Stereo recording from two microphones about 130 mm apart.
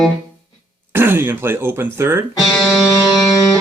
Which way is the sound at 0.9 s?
15° right (ahead or behind).